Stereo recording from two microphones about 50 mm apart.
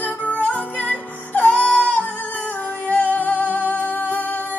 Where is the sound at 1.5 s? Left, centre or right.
Centre.